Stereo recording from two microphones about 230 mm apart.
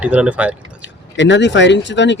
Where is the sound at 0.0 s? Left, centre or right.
Centre.